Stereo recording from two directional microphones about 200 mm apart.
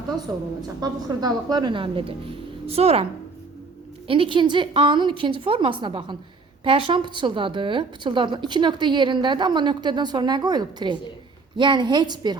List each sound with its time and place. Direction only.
0.8 s a woman's voice: 20° right (ahead or behind)